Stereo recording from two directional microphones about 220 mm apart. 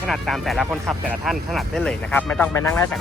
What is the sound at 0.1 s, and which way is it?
Speech, centre (ahead or behind).